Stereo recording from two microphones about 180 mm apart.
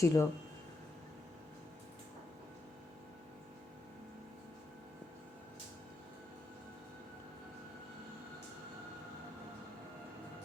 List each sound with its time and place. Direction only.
0.0 s speech: 15° left (ahead or behind)